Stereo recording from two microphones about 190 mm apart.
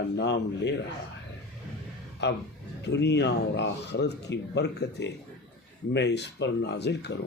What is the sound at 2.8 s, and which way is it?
Speech, 65° left (ahead or behind).